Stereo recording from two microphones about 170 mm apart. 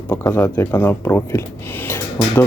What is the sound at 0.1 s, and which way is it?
Speech, 15° left (ahead or behind).